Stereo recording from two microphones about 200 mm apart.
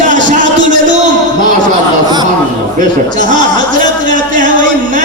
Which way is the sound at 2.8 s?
40° right (ahead or behind).